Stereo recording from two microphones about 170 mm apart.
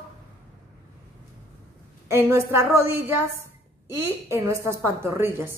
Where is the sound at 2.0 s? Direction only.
15° right (ahead or behind).